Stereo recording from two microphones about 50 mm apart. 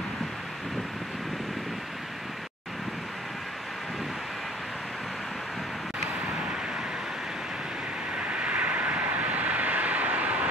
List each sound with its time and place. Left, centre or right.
8.2 s vehicle: right